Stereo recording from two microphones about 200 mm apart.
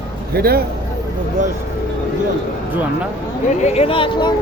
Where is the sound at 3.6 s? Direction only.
30° left (ahead or behind).